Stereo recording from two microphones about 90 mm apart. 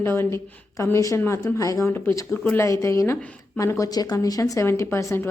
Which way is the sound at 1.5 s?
35° left (ahead or behind).